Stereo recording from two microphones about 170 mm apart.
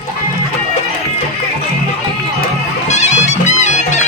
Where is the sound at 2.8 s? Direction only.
40° left (ahead or behind).